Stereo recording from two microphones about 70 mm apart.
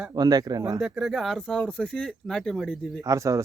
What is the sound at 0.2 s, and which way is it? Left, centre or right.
Speech, right.